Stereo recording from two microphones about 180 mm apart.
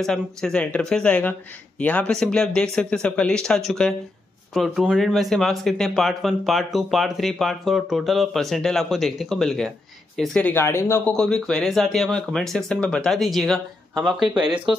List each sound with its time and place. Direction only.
0.0 s speech: 5° left (ahead or behind)